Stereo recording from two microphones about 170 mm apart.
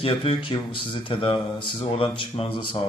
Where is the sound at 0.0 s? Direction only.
30° left (ahead or behind).